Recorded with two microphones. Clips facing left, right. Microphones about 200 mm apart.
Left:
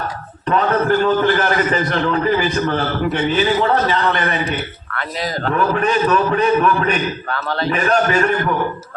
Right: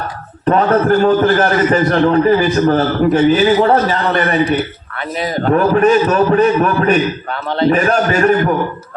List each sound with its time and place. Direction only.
0.4 s a man's voice: 45° right (ahead or behind)
3.8 s a man's voice: centre (ahead or behind)
4.9 s speech: 20° right (ahead or behind)
5.5 s a man's voice: 45° right (ahead or behind)
7.3 s speech: 20° right (ahead or behind)
7.7 s a man's voice: 40° right (ahead or behind)